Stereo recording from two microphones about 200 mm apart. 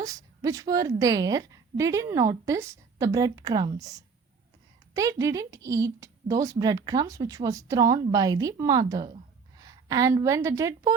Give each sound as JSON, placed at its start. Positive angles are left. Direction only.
{"t": 0.0, "sound": "speech", "side_deg": -15}